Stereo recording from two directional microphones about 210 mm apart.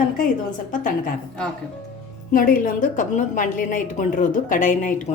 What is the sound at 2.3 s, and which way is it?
A woman's voice, 40° left (ahead or behind).